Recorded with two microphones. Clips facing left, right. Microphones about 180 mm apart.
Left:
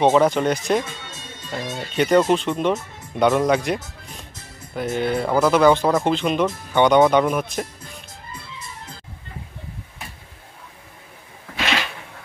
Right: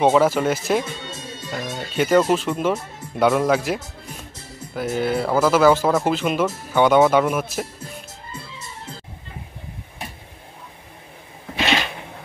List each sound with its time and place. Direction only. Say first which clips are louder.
0.0 s speech: even; 5° right (ahead or behind)
8.3 s music: even; 30° right (ahead or behind)